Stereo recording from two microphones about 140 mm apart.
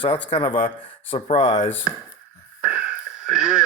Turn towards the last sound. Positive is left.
turn(degrees=-5)  # may be behind; listen again after turning